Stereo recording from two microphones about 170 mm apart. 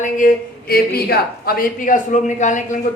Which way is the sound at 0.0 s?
50° left (ahead or behind).